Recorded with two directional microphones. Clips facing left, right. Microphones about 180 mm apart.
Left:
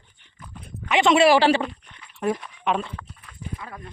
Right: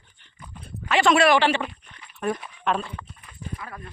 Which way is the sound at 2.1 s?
25° left (ahead or behind).